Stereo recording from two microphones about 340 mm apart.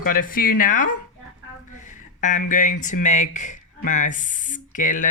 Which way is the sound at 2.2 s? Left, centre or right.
Left.